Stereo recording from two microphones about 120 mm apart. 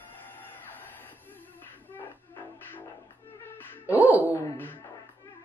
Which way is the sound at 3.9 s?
15° right (ahead or behind).